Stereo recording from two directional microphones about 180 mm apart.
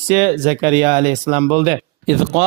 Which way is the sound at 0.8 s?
15° right (ahead or behind).